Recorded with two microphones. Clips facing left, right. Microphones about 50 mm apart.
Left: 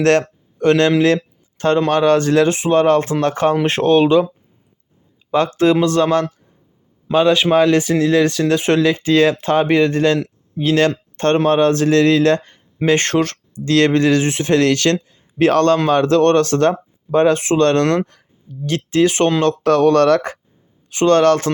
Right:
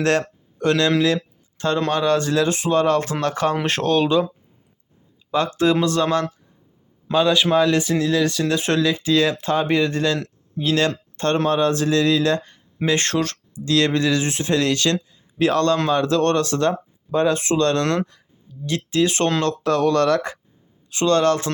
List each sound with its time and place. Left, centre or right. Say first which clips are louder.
0.0 s a sound: left 5 dB; left
0.7 s speech: left 5 dB; left
1.0 s a sound: left 5 dB; left
1.9 s speech: left 5 dB; left
5.3 s speech: left 4 dB; left
19.6 s speech: left 6 dB; left